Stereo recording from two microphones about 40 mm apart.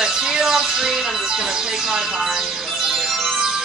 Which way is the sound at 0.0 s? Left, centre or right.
Centre.